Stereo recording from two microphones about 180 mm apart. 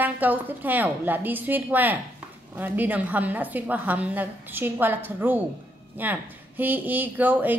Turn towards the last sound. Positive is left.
turn(degrees=-10)  # may be behind; listen again after turning